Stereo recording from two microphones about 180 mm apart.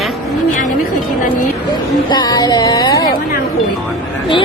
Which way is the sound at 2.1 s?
25° left (ahead or behind).